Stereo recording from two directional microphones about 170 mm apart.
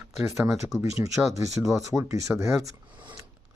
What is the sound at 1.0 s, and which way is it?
Speech, 15° right (ahead or behind).